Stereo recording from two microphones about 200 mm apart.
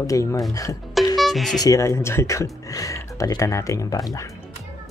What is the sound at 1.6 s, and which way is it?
Speech, 15° left (ahead or behind).